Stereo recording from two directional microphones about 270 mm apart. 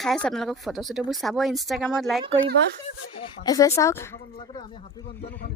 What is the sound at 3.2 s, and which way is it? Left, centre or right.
Speech, centre.